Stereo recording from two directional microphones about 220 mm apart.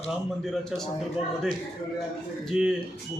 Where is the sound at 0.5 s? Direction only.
Centre (ahead or behind).